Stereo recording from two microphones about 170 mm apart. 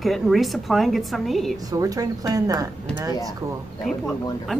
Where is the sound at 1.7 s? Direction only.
20° right (ahead or behind).